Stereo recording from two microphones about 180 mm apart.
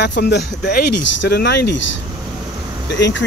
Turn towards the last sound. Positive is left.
turn(degrees=90)